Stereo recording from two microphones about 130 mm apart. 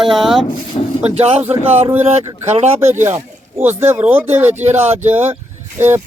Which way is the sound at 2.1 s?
55° right (ahead or behind).